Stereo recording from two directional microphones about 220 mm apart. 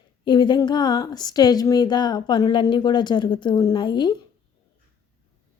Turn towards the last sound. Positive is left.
turn(degrees=20)  # may be behind; listen again after turning